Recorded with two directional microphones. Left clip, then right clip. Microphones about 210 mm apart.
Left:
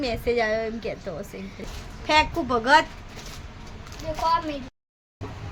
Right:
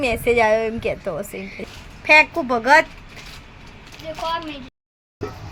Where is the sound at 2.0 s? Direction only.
15° right (ahead or behind).